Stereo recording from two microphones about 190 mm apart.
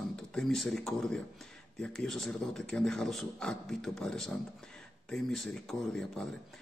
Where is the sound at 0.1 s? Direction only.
5° left (ahead or behind).